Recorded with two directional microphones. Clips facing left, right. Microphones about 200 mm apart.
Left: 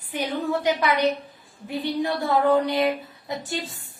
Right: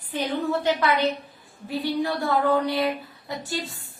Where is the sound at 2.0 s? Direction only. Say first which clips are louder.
Left 4 dB; 20° left (ahead or behind).